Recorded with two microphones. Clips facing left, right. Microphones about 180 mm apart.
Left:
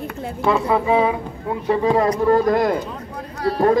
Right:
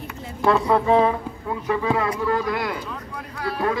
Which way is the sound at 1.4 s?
30° left (ahead or behind).